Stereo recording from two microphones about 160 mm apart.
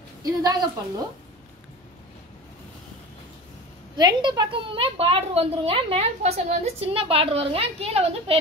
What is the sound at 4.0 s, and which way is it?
A woman's voice, 25° right (ahead or behind).